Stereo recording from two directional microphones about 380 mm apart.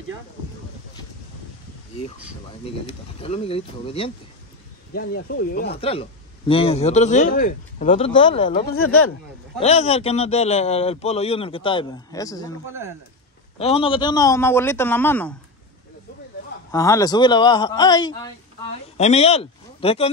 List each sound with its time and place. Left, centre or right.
2.6 s speech: centre
8.7 s speech: left
9.6 s speech: centre
13.6 s speech: centre
16.7 s speech: centre